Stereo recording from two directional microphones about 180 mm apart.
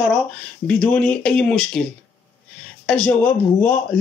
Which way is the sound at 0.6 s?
5° left (ahead or behind).